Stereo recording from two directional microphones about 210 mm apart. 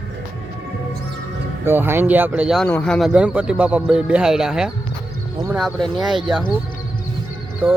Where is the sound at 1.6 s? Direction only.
10° right (ahead or behind).